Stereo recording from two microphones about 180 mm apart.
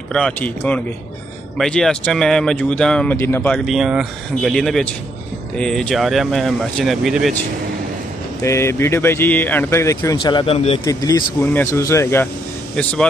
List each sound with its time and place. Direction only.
0.1 s speech: 5° left (ahead or behind)
3.5 s speech: centre (ahead or behind)
8.4 s speech: 15° left (ahead or behind)
10.1 s speech: 25° left (ahead or behind)
10.9 s speech: 20° left (ahead or behind)